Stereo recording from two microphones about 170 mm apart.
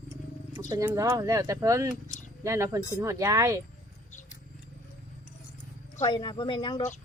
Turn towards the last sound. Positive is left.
turn(degrees=25)  # may be behind; listen again after turning